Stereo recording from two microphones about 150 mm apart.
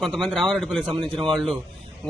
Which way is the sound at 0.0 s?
5° left (ahead or behind).